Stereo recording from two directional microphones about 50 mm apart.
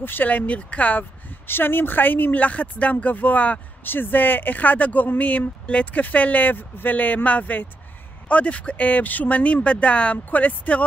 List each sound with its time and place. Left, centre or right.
0.0 s speech: left
0.3 s speech: left
1.5 s speech: left
3.8 s speech: left